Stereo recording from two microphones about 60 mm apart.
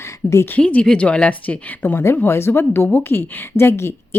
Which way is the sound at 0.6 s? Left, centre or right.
Left.